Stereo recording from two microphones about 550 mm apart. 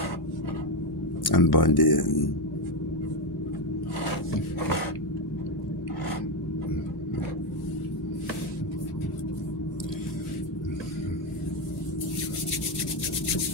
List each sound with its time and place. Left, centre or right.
1.2 s speech: left